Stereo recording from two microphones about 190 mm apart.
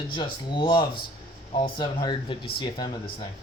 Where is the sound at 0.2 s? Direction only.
25° left (ahead or behind).